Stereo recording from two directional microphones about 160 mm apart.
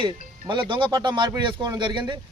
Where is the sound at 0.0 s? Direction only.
30° right (ahead or behind).